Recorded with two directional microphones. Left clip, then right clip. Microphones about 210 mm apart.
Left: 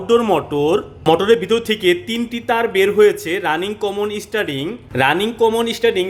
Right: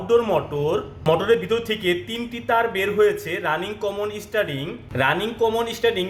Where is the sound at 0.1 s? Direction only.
45° left (ahead or behind).